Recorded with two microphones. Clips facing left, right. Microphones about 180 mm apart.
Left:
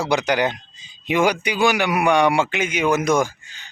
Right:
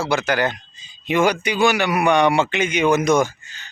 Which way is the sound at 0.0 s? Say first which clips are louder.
Left 1 dB; 15° left (ahead or behind).